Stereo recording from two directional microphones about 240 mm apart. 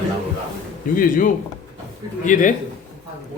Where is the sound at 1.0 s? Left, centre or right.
Left.